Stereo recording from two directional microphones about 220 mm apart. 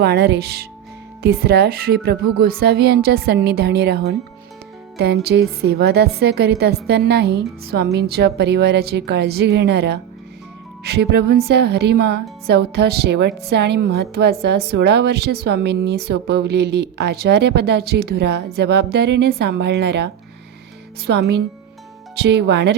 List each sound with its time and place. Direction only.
0.0 s a woman's voice: 45° right (ahead or behind)
21.1 s a woman's voice: 50° right (ahead or behind)